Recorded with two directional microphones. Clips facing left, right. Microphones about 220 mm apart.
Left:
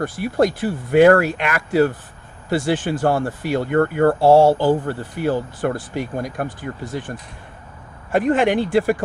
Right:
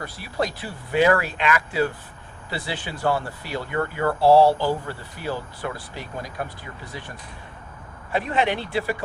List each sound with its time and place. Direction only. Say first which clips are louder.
0.0 s speech: left 9 dB; 50° left (ahead or behind)
8.1 s speech: left 7 dB; 50° left (ahead or behind)